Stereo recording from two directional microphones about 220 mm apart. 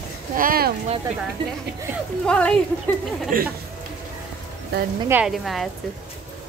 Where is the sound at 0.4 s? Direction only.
40° right (ahead or behind).